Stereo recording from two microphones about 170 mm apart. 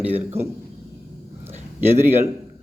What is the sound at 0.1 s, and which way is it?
Speech, 40° right (ahead or behind).